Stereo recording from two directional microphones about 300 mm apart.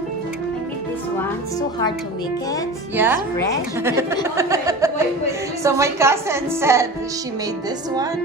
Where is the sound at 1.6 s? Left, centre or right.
Centre.